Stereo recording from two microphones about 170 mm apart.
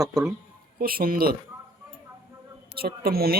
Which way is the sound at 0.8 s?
60° right (ahead or behind).